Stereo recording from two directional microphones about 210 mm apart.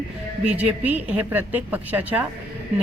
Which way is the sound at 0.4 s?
5° right (ahead or behind).